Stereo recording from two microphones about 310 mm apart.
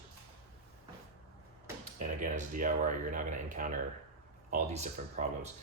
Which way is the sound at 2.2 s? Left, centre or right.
Right.